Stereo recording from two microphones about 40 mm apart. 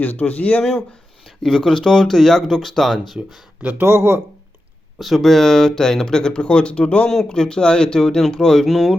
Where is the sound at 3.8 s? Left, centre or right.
Right.